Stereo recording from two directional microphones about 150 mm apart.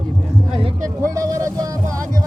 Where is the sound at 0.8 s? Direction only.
20° right (ahead or behind).